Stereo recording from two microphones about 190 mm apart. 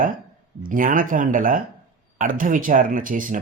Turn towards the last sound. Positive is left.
turn(degrees=-45)  # may be behind; listen again after turning